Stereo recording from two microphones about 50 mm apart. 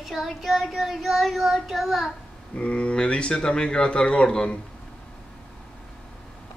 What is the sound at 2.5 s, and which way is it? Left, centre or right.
A man's voice, left.